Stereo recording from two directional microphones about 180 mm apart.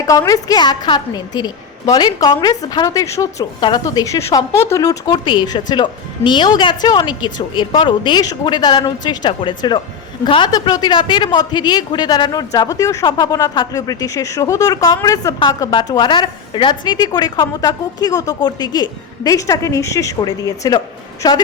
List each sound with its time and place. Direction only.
0.0 s a woman's voice: 20° left (ahead or behind)